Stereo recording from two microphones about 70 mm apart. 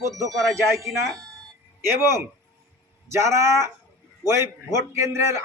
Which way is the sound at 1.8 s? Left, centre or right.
Right.